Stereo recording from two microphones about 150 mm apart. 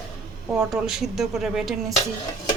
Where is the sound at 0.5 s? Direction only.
5° right (ahead or behind).